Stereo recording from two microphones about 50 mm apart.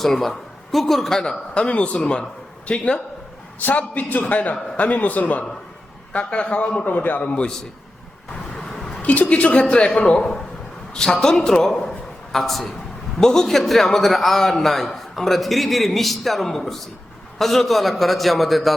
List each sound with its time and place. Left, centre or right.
0.0 s a man's voice: centre; by 3.0 s left
3.7 s a man's voice: left
6.1 s speech: left
6.8 s a man's voice: left
7.2 s speech: left
8.5 s music: centre
9.0 s speech: left
10.9 s a woman's voice: centre